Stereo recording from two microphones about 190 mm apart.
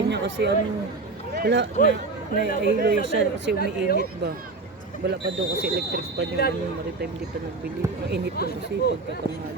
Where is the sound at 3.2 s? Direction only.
70° right (ahead or behind).